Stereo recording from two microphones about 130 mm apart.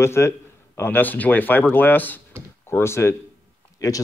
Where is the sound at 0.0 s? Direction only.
20° left (ahead or behind).